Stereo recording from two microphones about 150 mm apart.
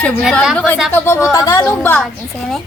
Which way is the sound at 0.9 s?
15° left (ahead or behind).